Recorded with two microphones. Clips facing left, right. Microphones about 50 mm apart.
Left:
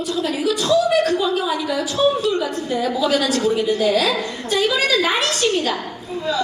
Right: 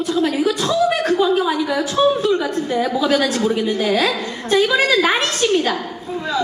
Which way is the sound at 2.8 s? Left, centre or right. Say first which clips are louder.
Right 2 dB; right.